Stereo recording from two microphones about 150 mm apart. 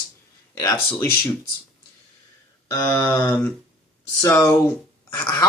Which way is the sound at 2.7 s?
20° left (ahead or behind).